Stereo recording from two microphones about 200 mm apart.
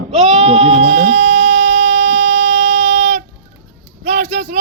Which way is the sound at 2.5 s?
35° right (ahead or behind).